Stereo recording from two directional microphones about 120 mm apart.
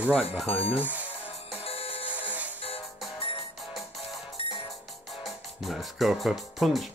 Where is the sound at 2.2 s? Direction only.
15° right (ahead or behind).